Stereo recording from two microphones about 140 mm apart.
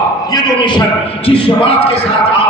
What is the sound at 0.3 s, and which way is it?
A man's voice, 30° left (ahead or behind).